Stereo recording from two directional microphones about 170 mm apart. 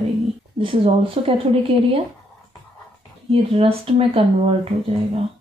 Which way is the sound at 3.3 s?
35° right (ahead or behind).